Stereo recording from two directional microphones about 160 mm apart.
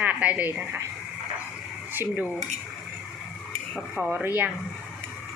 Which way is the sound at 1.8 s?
10° right (ahead or behind).